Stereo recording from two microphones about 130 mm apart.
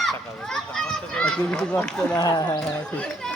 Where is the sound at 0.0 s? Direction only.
5° left (ahead or behind).